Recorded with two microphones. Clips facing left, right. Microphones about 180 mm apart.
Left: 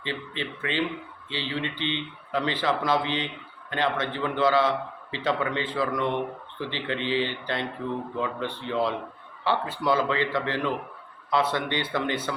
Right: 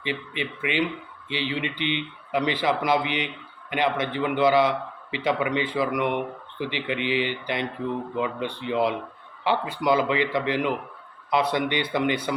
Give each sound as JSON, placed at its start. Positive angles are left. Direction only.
{"t": 0.0, "sound": "speech", "side_deg": -15}